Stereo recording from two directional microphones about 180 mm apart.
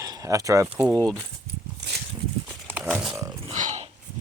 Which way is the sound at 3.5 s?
40° right (ahead or behind).